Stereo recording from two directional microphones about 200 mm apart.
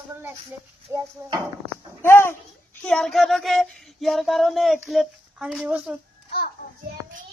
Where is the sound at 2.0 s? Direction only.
10° left (ahead or behind).